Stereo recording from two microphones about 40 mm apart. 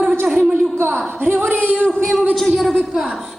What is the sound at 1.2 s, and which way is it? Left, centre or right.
Singing, right.